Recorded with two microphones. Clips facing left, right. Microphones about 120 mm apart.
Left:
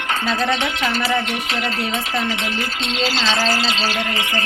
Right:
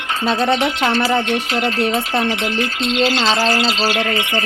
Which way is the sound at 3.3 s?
30° right (ahead or behind).